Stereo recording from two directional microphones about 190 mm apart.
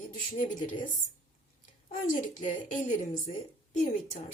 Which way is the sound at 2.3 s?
40° left (ahead or behind).